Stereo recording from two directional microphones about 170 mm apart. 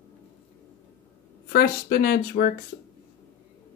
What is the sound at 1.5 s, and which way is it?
Speech, 60° left (ahead or behind).